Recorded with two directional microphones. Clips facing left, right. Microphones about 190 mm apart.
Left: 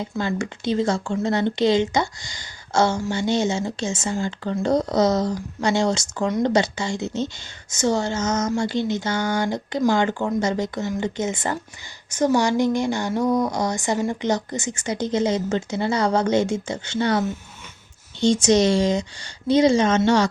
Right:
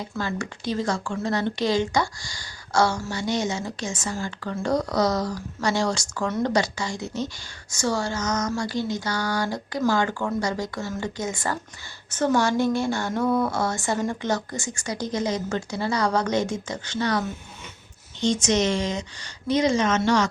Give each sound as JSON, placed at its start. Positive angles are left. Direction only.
{"t": 0.2, "sound": "speech", "side_deg": 25}